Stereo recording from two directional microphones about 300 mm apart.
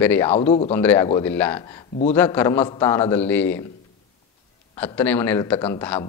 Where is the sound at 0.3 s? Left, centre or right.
Centre.